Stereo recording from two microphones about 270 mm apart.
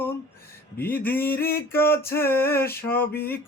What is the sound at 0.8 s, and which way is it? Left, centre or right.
Mantra, centre.